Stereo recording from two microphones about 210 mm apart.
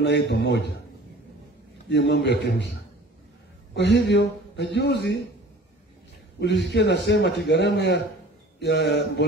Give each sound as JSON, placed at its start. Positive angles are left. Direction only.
{"t": 0.0, "sound": "a man's voice", "side_deg": 55}
{"t": 1.9, "sound": "a man's voice", "side_deg": 55}
{"t": 3.7, "sound": "a man's voice", "side_deg": 55}
{"t": 6.4, "sound": "a man's voice", "side_deg": 55}